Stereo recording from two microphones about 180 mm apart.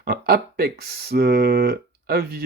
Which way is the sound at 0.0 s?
60° right (ahead or behind).